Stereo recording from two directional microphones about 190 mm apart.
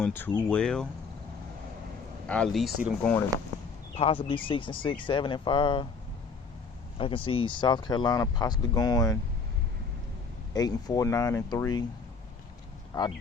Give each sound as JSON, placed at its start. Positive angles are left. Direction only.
{"t": 0.0, "sound": "speech", "side_deg": 10}
{"t": 2.2, "sound": "speech", "side_deg": 5}
{"t": 3.9, "sound": "speech", "side_deg": 30}
{"t": 7.0, "sound": "speech", "side_deg": 30}
{"t": 10.5, "sound": "speech", "side_deg": 20}
{"t": 12.9, "sound": "speech", "side_deg": 25}